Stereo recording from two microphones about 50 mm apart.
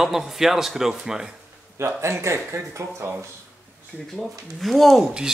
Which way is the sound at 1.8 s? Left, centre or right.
Right.